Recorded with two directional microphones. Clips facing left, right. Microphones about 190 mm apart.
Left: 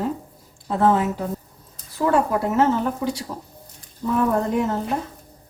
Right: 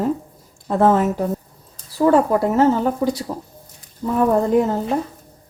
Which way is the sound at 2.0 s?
35° right (ahead or behind).